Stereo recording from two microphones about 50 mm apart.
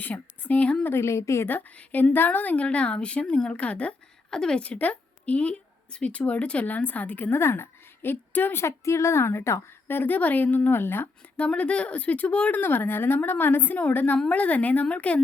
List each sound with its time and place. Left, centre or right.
0.0 s speech: left
0.9 s a woman's voice: left
1.5 s a woman's voice: left
4.3 s speech: centre
4.6 s a woman's voice: left
7.3 s a woman's voice: left
8.6 s a woman's voice: left
9.8 s a woman's voice: left
11.3 s a woman's voice: left
12.5 s a woman's voice: left